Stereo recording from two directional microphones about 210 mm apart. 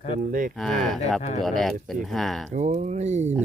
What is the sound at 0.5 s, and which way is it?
Speech, centre (ahead or behind).